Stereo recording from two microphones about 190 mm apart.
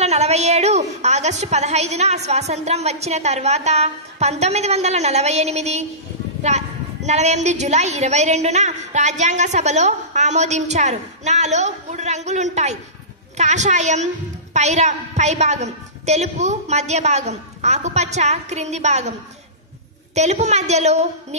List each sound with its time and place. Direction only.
0.0 s a woman's voice: 35° right (ahead or behind)
20.2 s a woman's voice: 35° right (ahead or behind)